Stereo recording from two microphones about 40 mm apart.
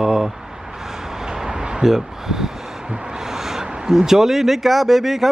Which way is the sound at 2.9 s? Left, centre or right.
Right.